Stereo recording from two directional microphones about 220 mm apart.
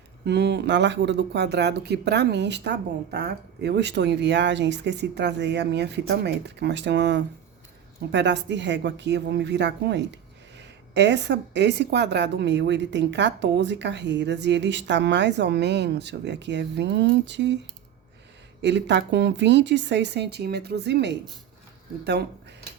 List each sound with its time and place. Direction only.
0.3 s a woman's voice: 50° right (ahead or behind)
18.6 s a woman's voice: 50° right (ahead or behind)